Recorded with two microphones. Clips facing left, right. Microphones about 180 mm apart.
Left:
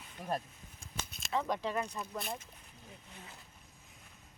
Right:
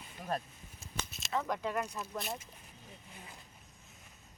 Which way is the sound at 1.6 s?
Centre (ahead or behind).